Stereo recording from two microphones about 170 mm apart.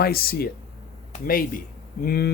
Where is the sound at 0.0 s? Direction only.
60° left (ahead or behind).